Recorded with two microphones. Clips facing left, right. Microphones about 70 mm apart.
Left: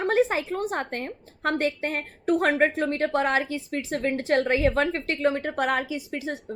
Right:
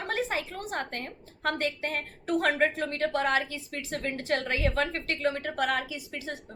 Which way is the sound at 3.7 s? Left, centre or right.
Left.